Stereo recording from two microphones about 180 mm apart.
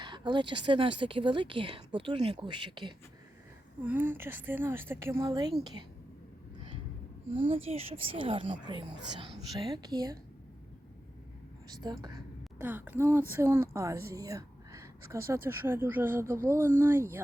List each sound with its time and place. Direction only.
0.0 s speech: 25° right (ahead or behind)
3.8 s a woman's voice: 10° right (ahead or behind)
7.4 s speech: 35° right (ahead or behind)
12.0 s a sound: 20° right (ahead or behind)
12.6 s a woman's voice: 10° right (ahead or behind)